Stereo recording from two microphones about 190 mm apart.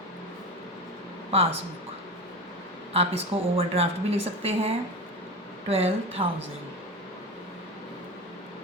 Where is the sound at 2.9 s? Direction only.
30° right (ahead or behind).